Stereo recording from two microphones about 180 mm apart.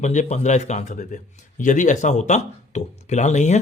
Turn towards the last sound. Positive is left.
turn(degrees=40)  # may be behind; listen again after turning